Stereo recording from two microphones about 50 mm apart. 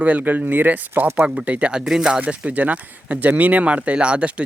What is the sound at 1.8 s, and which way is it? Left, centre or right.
Speech, centre.